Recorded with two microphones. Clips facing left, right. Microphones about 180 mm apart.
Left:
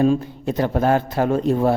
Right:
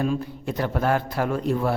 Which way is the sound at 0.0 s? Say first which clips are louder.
Left 7 dB; 25° left (ahead or behind).